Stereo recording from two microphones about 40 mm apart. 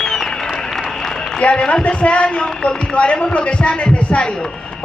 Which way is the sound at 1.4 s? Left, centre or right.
Left.